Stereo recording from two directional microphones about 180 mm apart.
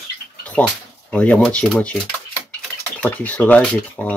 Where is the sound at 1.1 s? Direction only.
5° left (ahead or behind).